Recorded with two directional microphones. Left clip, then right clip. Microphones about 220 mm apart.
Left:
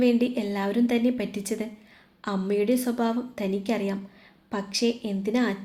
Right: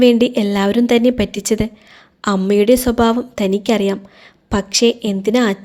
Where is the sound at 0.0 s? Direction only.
40° right (ahead or behind).